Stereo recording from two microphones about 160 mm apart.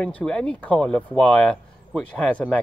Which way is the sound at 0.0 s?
5° left (ahead or behind).